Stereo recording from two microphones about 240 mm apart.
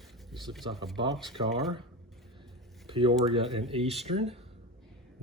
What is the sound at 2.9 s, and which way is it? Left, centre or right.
Speech, right.